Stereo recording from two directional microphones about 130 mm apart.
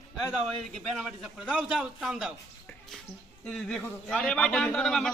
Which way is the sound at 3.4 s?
5° left (ahead or behind).